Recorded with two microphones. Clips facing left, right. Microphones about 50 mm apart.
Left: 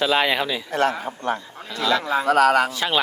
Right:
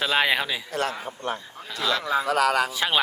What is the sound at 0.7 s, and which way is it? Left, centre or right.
Speech, left.